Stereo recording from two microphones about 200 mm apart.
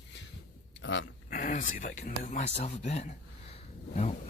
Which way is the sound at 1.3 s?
40° left (ahead or behind).